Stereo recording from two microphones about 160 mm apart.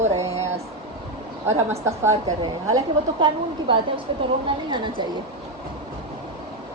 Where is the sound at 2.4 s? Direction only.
30° right (ahead or behind).